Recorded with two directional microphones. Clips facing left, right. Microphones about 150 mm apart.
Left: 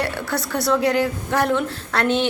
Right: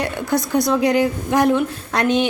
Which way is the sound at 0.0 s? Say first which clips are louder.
Right 4 dB; 15° right (ahead or behind).